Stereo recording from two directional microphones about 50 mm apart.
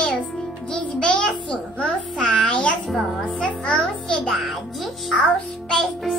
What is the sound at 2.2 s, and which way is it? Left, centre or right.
Speech, centre.